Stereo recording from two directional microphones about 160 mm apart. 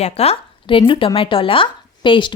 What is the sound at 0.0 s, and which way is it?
Speech, 40° left (ahead or behind).